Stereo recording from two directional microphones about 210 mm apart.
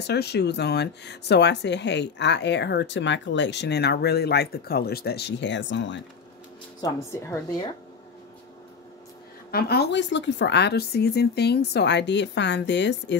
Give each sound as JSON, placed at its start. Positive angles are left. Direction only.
{"t": 0.0, "sound": "speech", "side_deg": 50}
{"t": 6.8, "sound": "a woman's voice", "side_deg": 15}
{"t": 9.5, "sound": "speech", "side_deg": 50}